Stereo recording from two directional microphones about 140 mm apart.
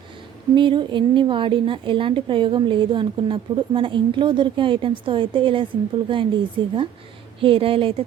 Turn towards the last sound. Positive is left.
turn(degrees=-40)  # may be behind; listen again after turning